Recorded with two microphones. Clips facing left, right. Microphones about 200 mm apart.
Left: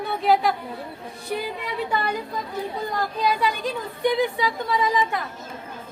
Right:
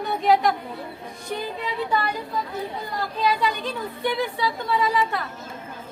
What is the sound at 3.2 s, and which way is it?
A woman's voice, 10° left (ahead or behind).